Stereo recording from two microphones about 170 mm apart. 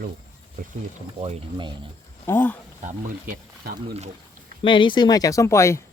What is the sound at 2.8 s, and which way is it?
Speech, 50° right (ahead or behind).